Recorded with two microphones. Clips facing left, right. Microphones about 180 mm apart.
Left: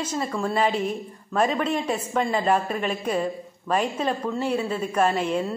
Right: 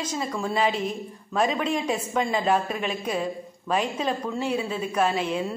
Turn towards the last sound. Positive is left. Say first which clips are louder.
# left 2 dB
turn(degrees=0)  # may be behind; listen again after turning